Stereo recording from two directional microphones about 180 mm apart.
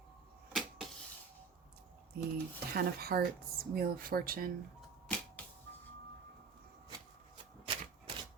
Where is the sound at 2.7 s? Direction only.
60° right (ahead or behind).